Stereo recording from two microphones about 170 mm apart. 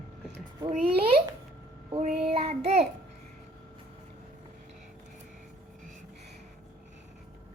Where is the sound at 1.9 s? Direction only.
40° right (ahead or behind).